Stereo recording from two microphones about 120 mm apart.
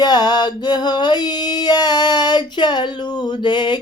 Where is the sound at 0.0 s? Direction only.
35° left (ahead or behind).